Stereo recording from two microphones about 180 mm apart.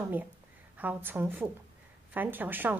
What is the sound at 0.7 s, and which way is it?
A woman's voice, 10° right (ahead or behind).